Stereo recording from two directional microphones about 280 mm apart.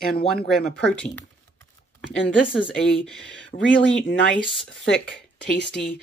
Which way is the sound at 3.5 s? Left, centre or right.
Left.